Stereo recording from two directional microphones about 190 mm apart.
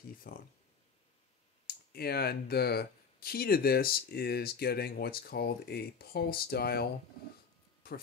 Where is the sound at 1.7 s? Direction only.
55° left (ahead or behind).